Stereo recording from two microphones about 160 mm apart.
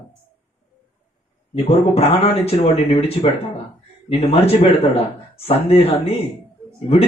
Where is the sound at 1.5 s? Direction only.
35° left (ahead or behind).